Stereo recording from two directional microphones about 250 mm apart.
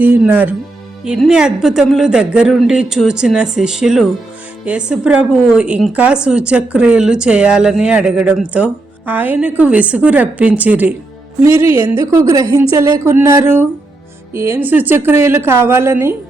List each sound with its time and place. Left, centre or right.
0.0 s a woman's voice: centre